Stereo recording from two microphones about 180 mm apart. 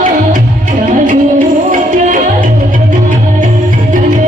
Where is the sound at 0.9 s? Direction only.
45° right (ahead or behind).